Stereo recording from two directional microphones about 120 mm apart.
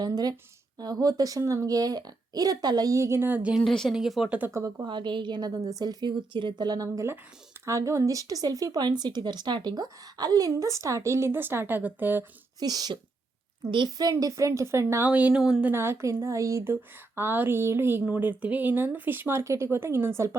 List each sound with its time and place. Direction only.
0.0 s speech: 30° right (ahead or behind); by 3.6 s 15° right (ahead or behind)
3.6 s a woman's voice: 5° left (ahead or behind); by 4.9 s 25° right (ahead or behind)
4.9 s speech: 40° right (ahead or behind); by 12.2 s 15° right (ahead or behind)
12.5 s speech: 35° right (ahead or behind); by 15.7 s 5° right (ahead or behind)
15.7 s speech: 20° right (ahead or behind)